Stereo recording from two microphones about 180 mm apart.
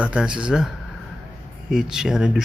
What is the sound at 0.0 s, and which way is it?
Speech, 5° right (ahead or behind).